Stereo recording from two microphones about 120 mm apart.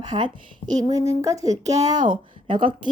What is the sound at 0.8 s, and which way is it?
Speech, 25° right (ahead or behind).